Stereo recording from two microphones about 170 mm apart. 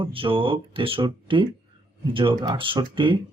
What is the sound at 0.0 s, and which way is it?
Speech, 30° right (ahead or behind).